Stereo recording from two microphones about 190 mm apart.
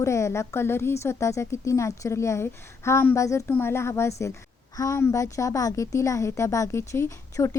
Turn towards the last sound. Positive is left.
turn(degrees=15)  # may be behind; listen again after turning